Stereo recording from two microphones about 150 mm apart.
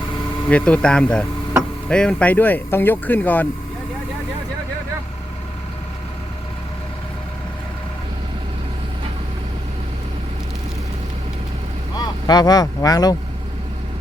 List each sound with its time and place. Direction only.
0.4 s speech: 10° left (ahead or behind)
11.9 s speech: 25° left (ahead or behind)